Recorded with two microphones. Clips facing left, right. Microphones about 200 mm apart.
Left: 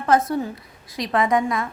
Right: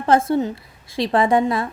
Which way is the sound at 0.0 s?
30° right (ahead or behind).